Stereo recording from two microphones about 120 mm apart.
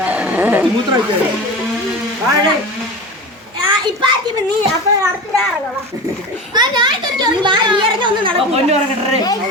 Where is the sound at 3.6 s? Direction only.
40° right (ahead or behind).